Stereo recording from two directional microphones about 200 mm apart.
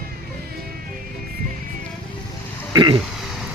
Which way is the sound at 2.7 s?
25° right (ahead or behind).